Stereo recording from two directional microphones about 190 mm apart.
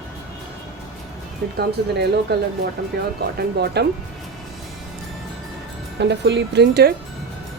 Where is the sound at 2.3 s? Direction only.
60° right (ahead or behind).